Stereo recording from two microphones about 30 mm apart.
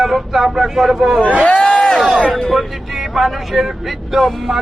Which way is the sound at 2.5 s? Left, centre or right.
Centre.